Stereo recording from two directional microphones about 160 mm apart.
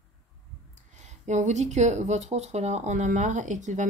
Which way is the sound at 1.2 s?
45° right (ahead or behind).